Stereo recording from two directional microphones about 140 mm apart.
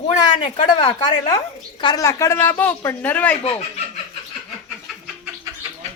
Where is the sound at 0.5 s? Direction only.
40° left (ahead or behind).